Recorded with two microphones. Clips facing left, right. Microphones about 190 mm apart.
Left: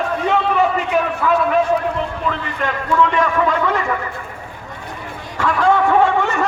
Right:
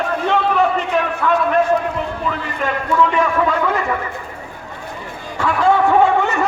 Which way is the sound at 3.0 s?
5° right (ahead or behind).